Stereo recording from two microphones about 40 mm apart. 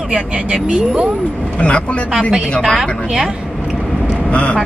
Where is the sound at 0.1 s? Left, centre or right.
Right.